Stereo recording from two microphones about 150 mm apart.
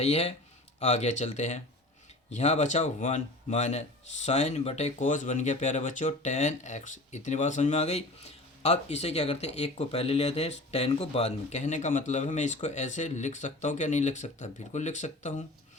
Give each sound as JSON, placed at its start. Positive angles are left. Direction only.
{"t": 0.0, "sound": "a man's voice", "side_deg": 45}